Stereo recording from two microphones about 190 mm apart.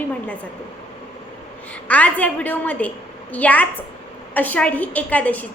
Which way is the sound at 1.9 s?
10° left (ahead or behind).